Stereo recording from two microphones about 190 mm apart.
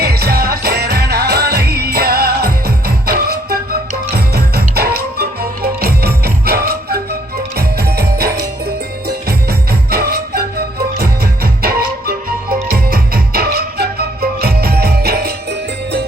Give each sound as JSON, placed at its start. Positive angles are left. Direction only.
{"t": 0.0, "sound": "music", "side_deg": -55}